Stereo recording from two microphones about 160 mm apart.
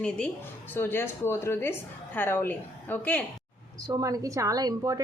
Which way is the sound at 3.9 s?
20° right (ahead or behind).